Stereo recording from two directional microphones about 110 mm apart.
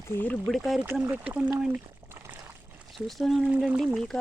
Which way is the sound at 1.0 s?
15° right (ahead or behind).